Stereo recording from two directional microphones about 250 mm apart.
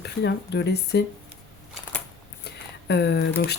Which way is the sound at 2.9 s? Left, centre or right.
Left.